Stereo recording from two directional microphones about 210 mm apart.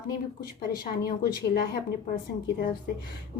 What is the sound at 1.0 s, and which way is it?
Speech, 45° left (ahead or behind).